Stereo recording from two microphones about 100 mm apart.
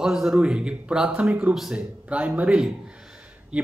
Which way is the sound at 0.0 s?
5° right (ahead or behind).